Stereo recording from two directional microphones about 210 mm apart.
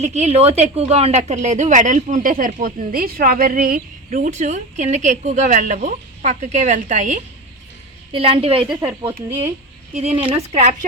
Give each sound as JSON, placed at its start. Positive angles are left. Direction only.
{"t": 0.0, "sound": "a woman's voice", "side_deg": -35}
{"t": 8.1, "sound": "a woman's voice", "side_deg": -25}
{"t": 8.6, "sound": "speech", "side_deg": -5}
{"t": 9.9, "sound": "a woman's voice", "side_deg": -30}